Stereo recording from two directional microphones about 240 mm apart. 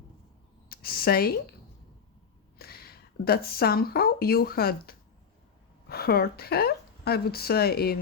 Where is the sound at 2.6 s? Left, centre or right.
Left.